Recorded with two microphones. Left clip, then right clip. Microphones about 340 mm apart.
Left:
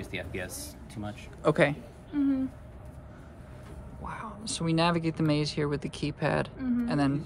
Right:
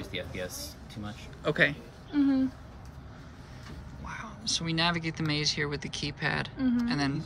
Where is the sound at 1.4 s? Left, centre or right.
Centre.